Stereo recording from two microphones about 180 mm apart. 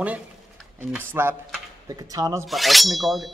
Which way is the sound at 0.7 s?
15° right (ahead or behind).